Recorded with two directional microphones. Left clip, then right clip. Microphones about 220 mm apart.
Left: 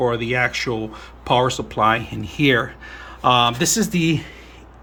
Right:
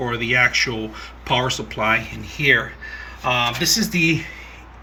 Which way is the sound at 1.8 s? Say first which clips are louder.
Left 4 dB; 30° left (ahead or behind).